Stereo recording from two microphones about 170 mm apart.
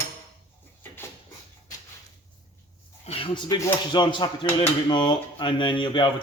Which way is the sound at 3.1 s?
25° left (ahead or behind).